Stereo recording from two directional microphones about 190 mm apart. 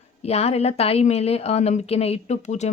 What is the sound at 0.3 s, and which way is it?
Speech, 35° left (ahead or behind).